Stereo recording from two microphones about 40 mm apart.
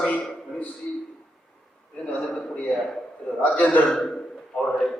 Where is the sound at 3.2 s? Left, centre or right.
Left.